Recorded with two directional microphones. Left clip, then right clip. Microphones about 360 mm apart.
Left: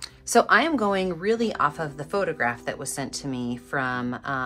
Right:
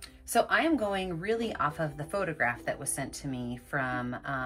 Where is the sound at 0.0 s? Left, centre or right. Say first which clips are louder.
Left 7 dB; centre.